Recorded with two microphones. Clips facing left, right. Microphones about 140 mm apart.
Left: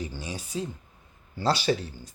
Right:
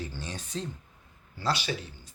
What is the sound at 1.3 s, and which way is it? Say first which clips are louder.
Speech: left 6 dB; 30° left (ahead or behind).